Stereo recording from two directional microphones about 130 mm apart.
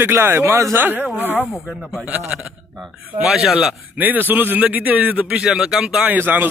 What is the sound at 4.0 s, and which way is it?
A man's voice, 15° right (ahead or behind).